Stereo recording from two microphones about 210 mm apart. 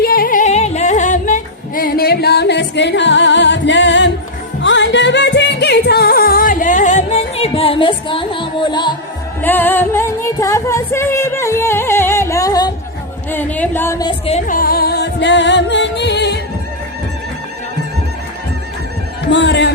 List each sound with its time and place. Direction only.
0.0 s music: 45° left (ahead or behind); by 9.0 s 20° left (ahead or behind)
9.4 s music: 10° left (ahead or behind)
13.3 s a sound: 10° left (ahead or behind)
14.3 s music: 35° left (ahead or behind); by 16.4 s 55° left (ahead or behind)
19.2 s music: 55° left (ahead or behind)